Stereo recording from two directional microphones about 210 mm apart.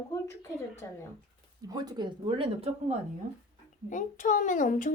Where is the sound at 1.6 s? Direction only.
20° right (ahead or behind).